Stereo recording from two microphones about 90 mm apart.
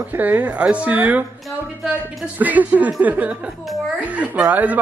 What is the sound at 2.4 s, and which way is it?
Speech, 20° right (ahead or behind).